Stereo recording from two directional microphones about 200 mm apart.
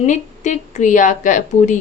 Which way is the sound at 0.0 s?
35° left (ahead or behind).